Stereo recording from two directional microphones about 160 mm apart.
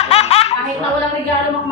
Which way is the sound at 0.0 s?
40° left (ahead or behind).